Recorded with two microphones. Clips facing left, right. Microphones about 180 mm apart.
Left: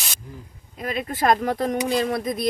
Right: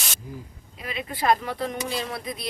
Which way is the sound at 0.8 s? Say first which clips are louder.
Left 5 dB; 45° left (ahead or behind).